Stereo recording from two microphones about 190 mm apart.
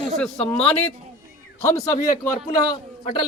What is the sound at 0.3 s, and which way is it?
Speech, 30° left (ahead or behind).